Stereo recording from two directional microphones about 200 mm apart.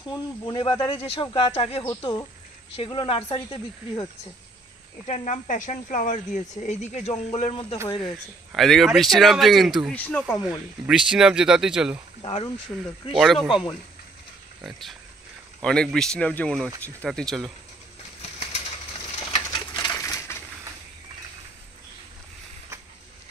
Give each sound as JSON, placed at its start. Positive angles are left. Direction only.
{"t": 0.1, "sound": "speech", "side_deg": 25}
{"t": 1.9, "sound": "speech", "side_deg": 20}
{"t": 5.0, "sound": "speech", "side_deg": 35}
{"t": 8.0, "sound": "speech", "side_deg": 0}
{"t": 12.2, "sound": "speech", "side_deg": 30}
{"t": 12.7, "sound": "speech", "side_deg": 10}
{"t": 13.1, "sound": "speech", "side_deg": 0}
{"t": 18.2, "sound": "a sound", "side_deg": 30}
{"t": 19.4, "sound": "pigeon", "side_deg": 20}